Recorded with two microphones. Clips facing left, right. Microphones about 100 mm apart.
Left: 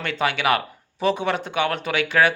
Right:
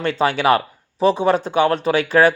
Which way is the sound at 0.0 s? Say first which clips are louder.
Right 5 dB; 35° right (ahead or behind).